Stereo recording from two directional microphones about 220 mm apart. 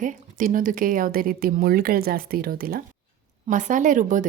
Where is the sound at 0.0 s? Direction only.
35° right (ahead or behind).